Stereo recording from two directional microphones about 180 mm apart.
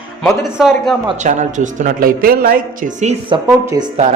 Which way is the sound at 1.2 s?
45° right (ahead or behind).